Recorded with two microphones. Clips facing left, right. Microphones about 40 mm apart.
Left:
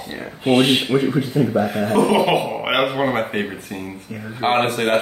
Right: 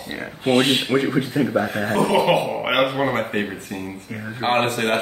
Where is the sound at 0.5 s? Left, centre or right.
Centre.